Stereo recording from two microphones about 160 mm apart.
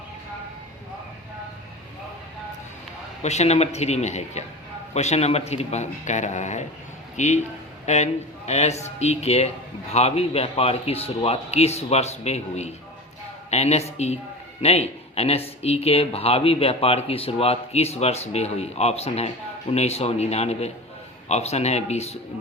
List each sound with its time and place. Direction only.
3.2 s a man's voice: 45° left (ahead or behind)